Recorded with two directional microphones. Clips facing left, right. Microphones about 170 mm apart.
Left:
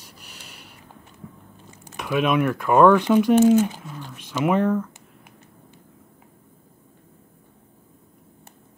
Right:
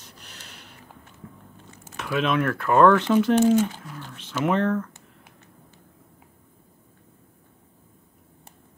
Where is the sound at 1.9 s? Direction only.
10° left (ahead or behind).